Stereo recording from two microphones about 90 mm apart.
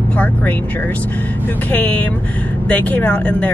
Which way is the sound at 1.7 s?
20° left (ahead or behind).